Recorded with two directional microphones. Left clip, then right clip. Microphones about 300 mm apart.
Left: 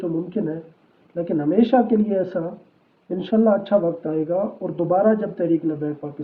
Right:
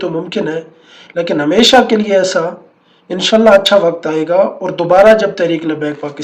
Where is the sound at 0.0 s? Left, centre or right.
Centre.